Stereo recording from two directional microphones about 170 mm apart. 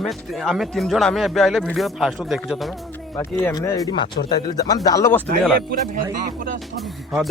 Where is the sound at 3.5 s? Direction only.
20° left (ahead or behind).